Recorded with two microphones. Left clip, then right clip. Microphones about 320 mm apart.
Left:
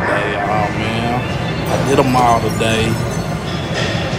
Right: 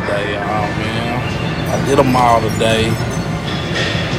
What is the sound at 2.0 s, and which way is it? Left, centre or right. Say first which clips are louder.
Speech: right 2 dB; centre.